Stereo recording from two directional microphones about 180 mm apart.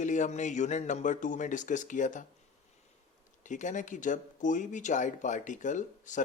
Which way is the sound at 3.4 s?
45° left (ahead or behind).